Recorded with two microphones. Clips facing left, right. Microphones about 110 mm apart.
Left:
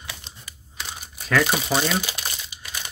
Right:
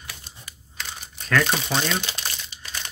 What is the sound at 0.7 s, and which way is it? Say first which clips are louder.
Crumpling: left 1 dB; 10° left (ahead or behind).